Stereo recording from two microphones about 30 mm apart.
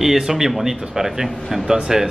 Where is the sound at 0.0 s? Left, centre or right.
Centre.